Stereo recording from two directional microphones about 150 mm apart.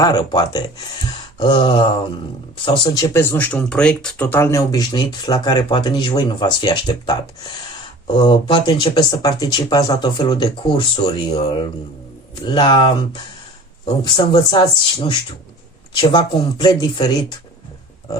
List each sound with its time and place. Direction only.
0.0 s speech: 30° left (ahead or behind)
14.0 s speech: 35° left (ahead or behind)
16.0 s speech: 30° left (ahead or behind)